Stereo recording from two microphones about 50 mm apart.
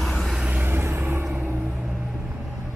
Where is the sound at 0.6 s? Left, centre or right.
Right.